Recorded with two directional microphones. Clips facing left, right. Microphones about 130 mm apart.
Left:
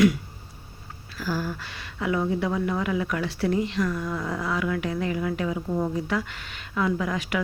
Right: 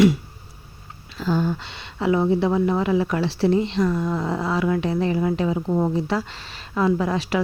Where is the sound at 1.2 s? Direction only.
25° right (ahead or behind).